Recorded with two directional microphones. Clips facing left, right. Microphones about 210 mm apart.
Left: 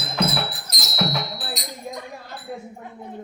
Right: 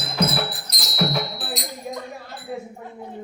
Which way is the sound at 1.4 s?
Centre (ahead or behind).